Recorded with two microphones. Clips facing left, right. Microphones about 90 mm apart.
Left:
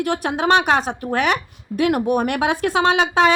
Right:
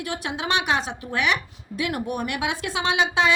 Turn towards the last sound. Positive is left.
turn(degrees=50)  # may be behind; listen again after turning